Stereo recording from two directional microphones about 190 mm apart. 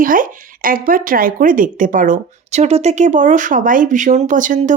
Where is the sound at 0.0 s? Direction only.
45° right (ahead or behind).